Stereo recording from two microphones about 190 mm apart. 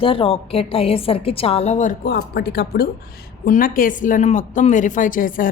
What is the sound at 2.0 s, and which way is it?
Speech, 60° left (ahead or behind).